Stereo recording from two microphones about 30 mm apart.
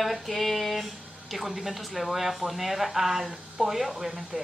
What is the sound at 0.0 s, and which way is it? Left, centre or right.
Speech, centre.